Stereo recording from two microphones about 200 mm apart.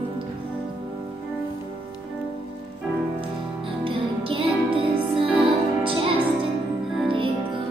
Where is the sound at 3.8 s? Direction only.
25° right (ahead or behind).